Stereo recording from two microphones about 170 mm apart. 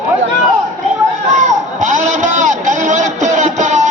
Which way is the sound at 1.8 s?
45° right (ahead or behind).